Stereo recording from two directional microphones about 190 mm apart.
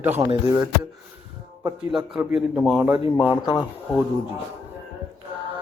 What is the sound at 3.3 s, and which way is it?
Speech, 25° left (ahead or behind).